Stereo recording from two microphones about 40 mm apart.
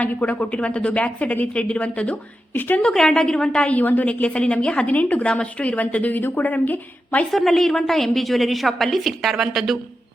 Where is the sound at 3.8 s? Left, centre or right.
Left.